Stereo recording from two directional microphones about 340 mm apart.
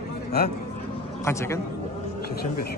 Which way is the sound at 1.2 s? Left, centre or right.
Centre.